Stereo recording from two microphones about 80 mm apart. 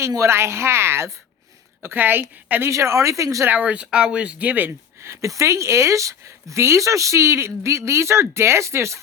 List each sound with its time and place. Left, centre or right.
0.2 s a woman's voice: right
3.5 s speech: centre
5.0 s a woman's voice: right